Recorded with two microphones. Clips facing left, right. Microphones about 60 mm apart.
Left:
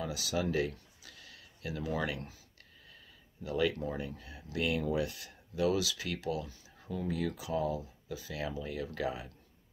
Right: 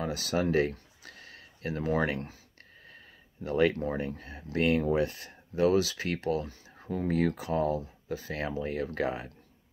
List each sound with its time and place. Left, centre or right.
0.0 s speech: right
3.4 s speech: right